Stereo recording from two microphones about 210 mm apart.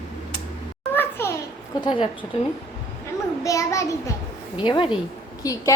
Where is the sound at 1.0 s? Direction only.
10° left (ahead or behind).